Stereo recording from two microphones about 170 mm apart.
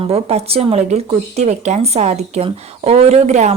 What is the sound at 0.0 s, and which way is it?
Speech, 35° right (ahead or behind).